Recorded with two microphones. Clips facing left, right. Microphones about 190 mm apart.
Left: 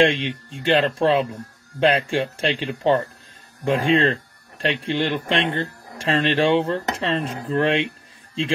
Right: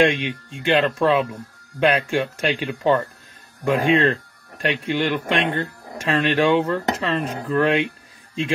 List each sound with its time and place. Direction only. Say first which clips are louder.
0.0 s speech: even; 30° left (ahead or behind)